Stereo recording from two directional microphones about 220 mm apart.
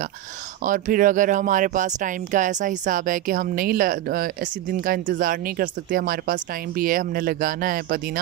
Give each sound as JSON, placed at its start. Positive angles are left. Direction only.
{"t": 0.7, "sound": "speech", "side_deg": -40}